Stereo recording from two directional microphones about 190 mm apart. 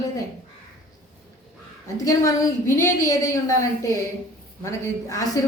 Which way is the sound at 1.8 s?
20° left (ahead or behind).